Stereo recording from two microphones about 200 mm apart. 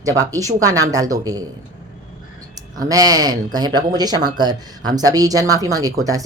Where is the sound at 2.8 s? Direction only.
20° right (ahead or behind).